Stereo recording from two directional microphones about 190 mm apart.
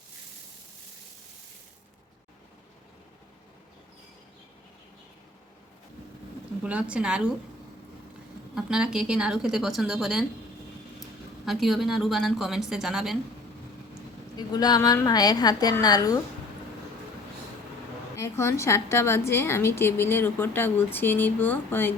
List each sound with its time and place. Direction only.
6.6 s a woman's voice: 5° right (ahead or behind)
8.5 s a woman's voice: 5° right (ahead or behind)
11.4 s a woman's voice: centre (ahead or behind)
14.3 s a woman's voice: 20° left (ahead or behind)
18.2 s a woman's voice: 15° left (ahead or behind)